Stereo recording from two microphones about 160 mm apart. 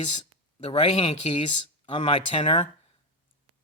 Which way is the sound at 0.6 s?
35° left (ahead or behind).